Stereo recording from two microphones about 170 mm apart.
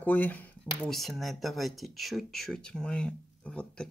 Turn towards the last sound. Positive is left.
turn(degrees=5)  # may be behind; listen again after turning